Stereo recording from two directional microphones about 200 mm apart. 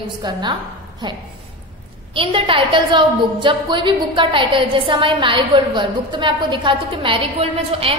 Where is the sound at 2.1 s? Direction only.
25° right (ahead or behind).